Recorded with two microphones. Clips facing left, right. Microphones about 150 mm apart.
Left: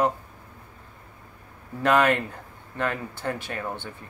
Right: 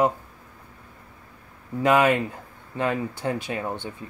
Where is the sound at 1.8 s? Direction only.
10° right (ahead or behind).